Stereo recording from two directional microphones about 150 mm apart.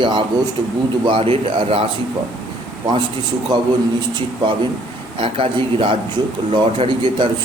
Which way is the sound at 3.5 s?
30° right (ahead or behind).